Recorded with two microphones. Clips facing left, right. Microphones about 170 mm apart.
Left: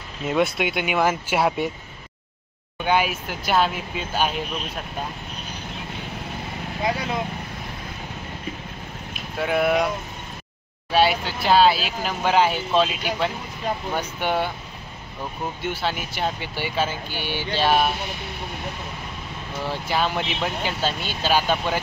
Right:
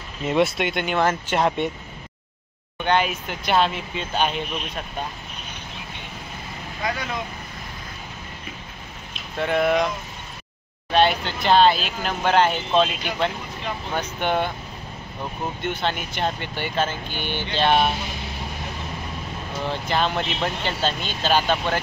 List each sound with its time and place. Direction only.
0.3 s speech: centre (ahead or behind)
2.8 s speech: 5° left (ahead or behind)
6.8 s speech: 30° left (ahead or behind)
9.4 s speech: 5° left (ahead or behind)
15.6 s speech: 5° left (ahead or behind)
19.6 s speech: 10° left (ahead or behind)